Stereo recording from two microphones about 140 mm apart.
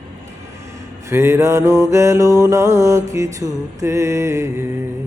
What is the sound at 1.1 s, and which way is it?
Music, 20° right (ahead or behind).